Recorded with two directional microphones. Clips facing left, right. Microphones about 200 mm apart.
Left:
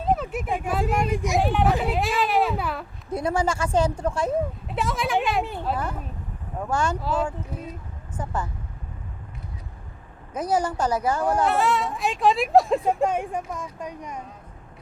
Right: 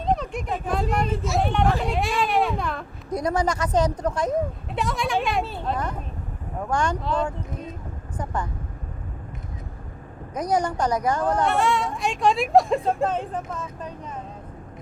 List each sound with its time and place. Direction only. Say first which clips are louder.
0.0 s speech: left 1 dB; 5° left (ahead or behind)
1.4 s speech: even; centre (ahead or behind)
3.1 s speech: right 1 dB; 25° left (ahead or behind)
4.3 s speech: even; centre (ahead or behind)
5.4 s speech: even; 15° left (ahead or behind)
10.4 s speech: even; 5° left (ahead or behind)
12.8 s speech: left 1 dB; 15° left (ahead or behind)